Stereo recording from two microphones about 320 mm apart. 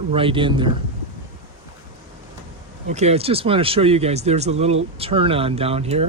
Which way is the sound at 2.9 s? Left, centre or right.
Centre.